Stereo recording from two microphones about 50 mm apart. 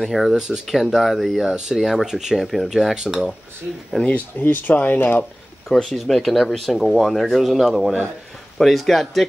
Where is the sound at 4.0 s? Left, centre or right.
Left.